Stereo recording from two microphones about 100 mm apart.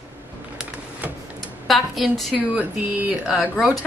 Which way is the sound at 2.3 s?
15° right (ahead or behind).